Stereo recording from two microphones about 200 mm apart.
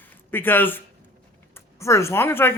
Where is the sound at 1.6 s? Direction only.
15° left (ahead or behind).